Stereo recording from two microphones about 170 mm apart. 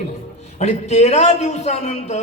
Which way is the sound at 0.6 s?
40° left (ahead or behind).